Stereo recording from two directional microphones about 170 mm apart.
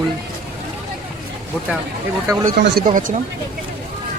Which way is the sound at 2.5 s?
70° right (ahead or behind).